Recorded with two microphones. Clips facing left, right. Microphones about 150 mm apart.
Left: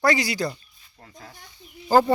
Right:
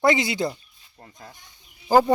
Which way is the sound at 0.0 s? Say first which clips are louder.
Right 2 dB; 20° right (ahead or behind).